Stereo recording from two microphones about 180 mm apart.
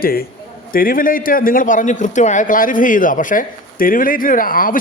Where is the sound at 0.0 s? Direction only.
55° left (ahead or behind).